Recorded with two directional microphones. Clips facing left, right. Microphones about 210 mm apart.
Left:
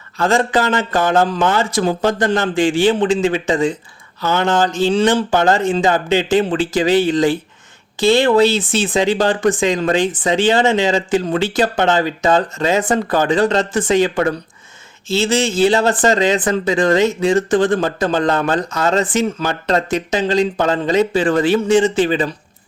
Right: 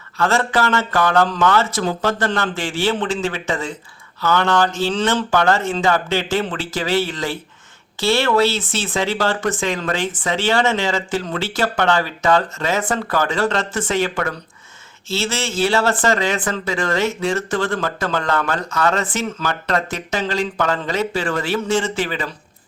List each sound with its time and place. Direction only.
0.2 s speech: 20° left (ahead or behind)
15.1 s speech: 15° left (ahead or behind)